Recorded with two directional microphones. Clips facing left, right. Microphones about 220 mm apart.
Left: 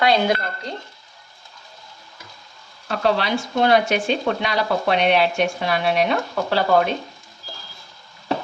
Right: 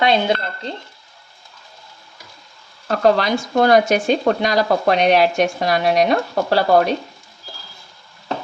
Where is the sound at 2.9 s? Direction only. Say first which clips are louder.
Right 5 dB; 45° right (ahead or behind).